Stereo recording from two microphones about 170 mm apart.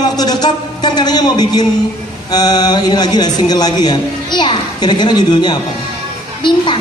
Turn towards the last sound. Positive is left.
turn(degrees=30)  # may be behind; listen again after turning